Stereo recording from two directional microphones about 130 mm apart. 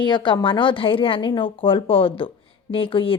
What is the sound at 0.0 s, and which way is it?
A woman's voice, 40° left (ahead or behind).